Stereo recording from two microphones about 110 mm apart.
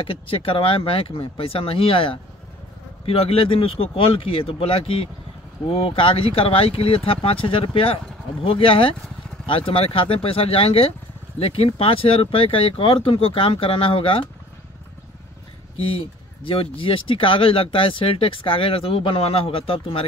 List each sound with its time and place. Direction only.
0.1 s speech: 55° left (ahead or behind)
16.4 s speech: 55° left (ahead or behind)